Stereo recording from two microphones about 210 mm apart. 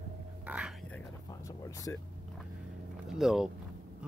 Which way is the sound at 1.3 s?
15° left (ahead or behind).